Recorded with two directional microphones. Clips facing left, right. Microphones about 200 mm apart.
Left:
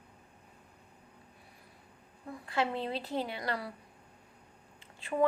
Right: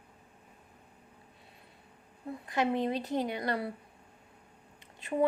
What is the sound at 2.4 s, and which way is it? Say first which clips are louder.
A woman's voice: right 3 dB; 15° right (ahead or behind).